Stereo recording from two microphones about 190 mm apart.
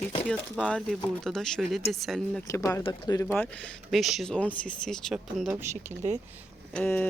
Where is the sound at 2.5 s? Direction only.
15° left (ahead or behind); by 5.6 s 5° right (ahead or behind).